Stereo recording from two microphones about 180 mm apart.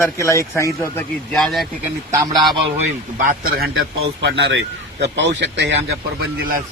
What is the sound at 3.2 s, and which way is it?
Speech, 55° right (ahead or behind).